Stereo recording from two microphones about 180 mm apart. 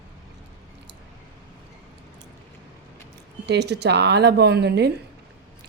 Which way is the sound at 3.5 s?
70° right (ahead or behind).